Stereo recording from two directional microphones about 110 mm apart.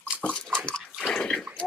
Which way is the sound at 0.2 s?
10° left (ahead or behind).